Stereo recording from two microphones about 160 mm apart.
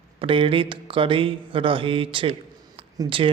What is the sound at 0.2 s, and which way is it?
Speech, 35° right (ahead or behind).